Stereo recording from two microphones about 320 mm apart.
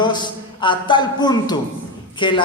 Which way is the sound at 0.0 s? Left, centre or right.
Centre.